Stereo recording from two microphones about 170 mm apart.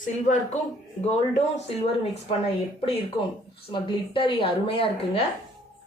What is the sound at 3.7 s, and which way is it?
A woman's voice, 30° left (ahead or behind).